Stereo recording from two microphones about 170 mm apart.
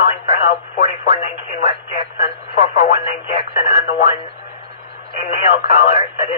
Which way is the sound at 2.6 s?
35° left (ahead or behind).